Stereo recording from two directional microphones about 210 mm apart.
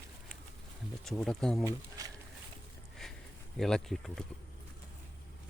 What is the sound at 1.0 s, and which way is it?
Speech, centre (ahead or behind).